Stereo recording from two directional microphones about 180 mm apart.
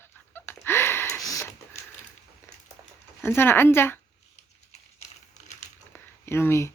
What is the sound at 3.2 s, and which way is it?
Speech, 15° left (ahead or behind).